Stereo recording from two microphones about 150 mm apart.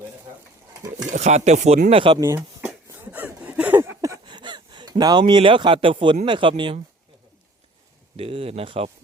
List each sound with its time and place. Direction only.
1.1 s speech: 50° right (ahead or behind)
2.2 s speech: 15° right (ahead or behind)
2.9 s a sound: 10° right (ahead or behind); by 6.1 s 35° right (ahead or behind)
6.2 s speech: 35° right (ahead or behind)
8.1 s speech: 40° right (ahead or behind)